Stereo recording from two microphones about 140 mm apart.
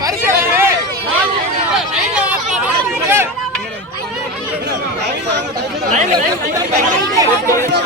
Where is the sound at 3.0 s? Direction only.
15° right (ahead or behind).